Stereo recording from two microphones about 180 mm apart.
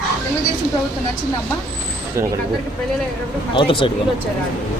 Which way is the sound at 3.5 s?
30° left (ahead or behind).